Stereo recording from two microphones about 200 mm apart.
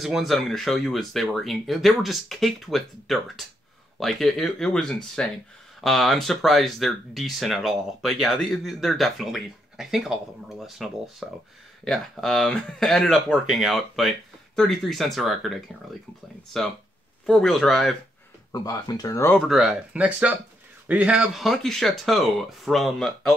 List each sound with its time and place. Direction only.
0.0 s speech: centre (ahead or behind)
17.3 s speech: 5° left (ahead or behind)
18.5 s speech: 20° left (ahead or behind)
19.3 s speech: centre (ahead or behind)